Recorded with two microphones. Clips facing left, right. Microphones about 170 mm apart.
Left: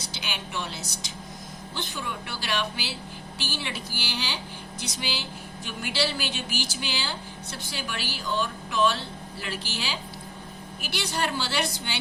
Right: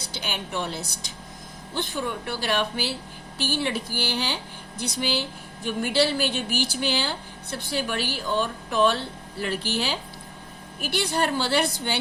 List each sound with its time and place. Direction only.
0.3 s a woman's voice: 55° right (ahead or behind)